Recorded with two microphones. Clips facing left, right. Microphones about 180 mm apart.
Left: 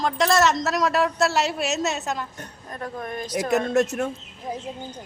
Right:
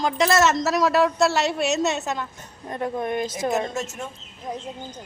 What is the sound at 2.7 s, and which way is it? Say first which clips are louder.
Speech: right 6 dB; 20° right (ahead or behind).